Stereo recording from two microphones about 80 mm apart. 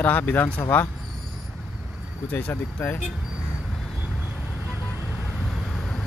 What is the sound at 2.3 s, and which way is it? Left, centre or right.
Speech, left.